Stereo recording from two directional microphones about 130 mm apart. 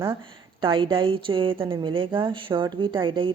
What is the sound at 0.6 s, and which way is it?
Speech, 40° right (ahead or behind).